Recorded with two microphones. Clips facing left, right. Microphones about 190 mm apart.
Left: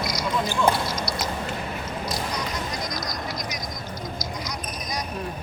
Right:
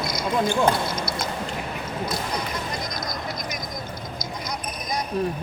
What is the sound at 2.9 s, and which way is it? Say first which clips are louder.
Vehicle: even; 55° right (ahead or behind).